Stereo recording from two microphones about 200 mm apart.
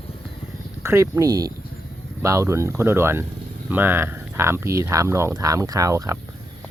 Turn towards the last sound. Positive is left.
turn(degrees=-15)  # may be behind; listen again after turning